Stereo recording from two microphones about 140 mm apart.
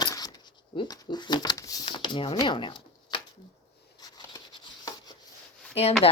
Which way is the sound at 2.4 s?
35° left (ahead or behind).